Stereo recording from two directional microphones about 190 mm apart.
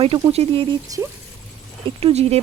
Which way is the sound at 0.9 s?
20° right (ahead or behind).